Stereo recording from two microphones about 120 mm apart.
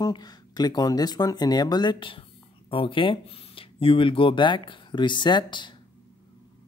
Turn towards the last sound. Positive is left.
turn(degrees=40)  # may be behind; listen again after turning